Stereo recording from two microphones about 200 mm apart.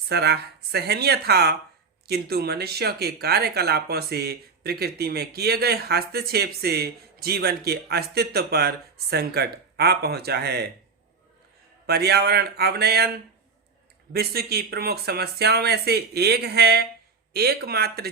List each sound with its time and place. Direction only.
0.1 s speech: 55° right (ahead or behind)
11.9 s speech: 55° right (ahead or behind)
14.1 s speech: 50° right (ahead or behind)